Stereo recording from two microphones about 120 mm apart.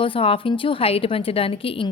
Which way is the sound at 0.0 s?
50° left (ahead or behind).